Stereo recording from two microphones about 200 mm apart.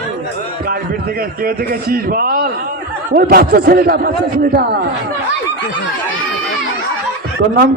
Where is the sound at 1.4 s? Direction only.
45° right (ahead or behind).